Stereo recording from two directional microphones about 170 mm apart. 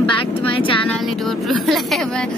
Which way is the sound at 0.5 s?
30° left (ahead or behind).